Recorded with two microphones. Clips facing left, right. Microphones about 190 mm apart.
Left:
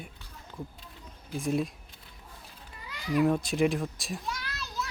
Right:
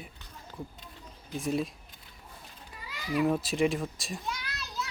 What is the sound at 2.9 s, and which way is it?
A child's voice, centre (ahead or behind).